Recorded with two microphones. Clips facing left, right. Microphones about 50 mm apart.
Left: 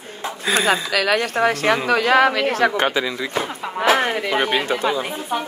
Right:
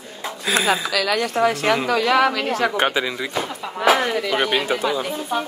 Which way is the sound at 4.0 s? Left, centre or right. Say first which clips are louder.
Left 1 dB; left.